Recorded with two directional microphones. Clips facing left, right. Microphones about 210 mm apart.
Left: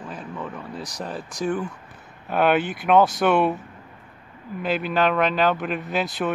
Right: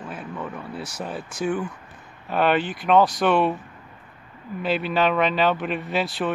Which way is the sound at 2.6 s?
55° left (ahead or behind).